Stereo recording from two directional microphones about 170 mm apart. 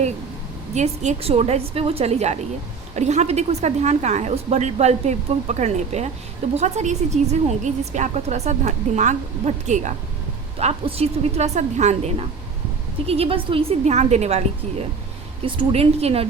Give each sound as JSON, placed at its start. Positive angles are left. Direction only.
{"t": 0.7, "sound": "a woman's voice", "side_deg": -45}
{"t": 15.4, "sound": "a woman's voice", "side_deg": -35}